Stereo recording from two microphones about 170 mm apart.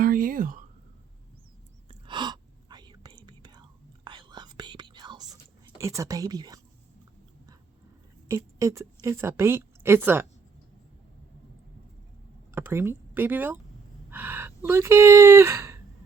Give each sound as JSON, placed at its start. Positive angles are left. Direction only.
{"t": 0.0, "sound": "a sound", "side_deg": -60}
{"t": 1.9, "sound": "whispering", "side_deg": -30}
{"t": 8.3, "sound": "a woman's voice", "side_deg": -20}
{"t": 12.5, "sound": "speech", "side_deg": -15}